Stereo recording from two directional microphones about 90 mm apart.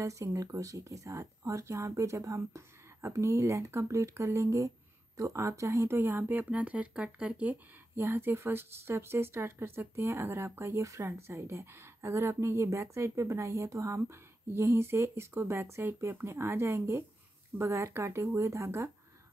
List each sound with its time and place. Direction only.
0.0 s speech: 35° right (ahead or behind)